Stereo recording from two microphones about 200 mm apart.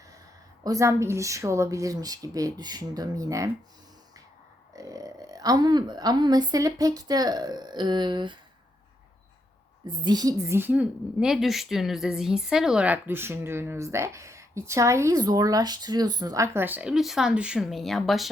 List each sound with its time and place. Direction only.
0.6 s a woman's voice: 15° right (ahead or behind)
4.7 s a woman's voice: 15° right (ahead or behind)
9.8 s a woman's voice: 20° right (ahead or behind); by 18.3 s centre (ahead or behind)